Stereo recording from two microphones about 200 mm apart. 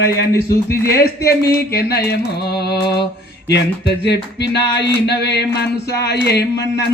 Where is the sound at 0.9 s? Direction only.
50° left (ahead or behind).